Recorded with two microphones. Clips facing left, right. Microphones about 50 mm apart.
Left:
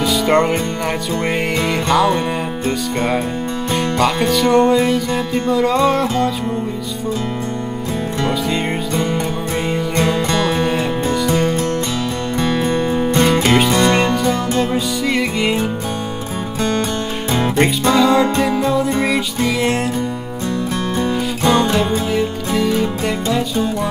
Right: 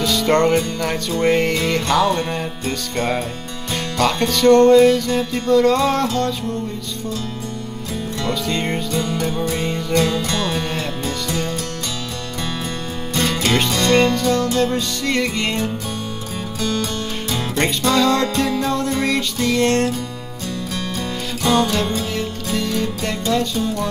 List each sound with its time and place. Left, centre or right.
0.0 s music: centre
8.3 s music: centre
8.9 s music: left
17.9 s music: centre
21.5 s music: centre